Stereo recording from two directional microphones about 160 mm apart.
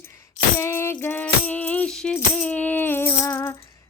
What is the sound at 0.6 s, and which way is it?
Music, 15° left (ahead or behind).